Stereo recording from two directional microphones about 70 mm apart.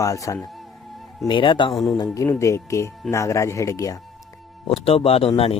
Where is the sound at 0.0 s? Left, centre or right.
Left.